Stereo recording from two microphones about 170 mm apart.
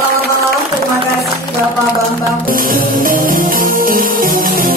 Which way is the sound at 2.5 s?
55° right (ahead or behind).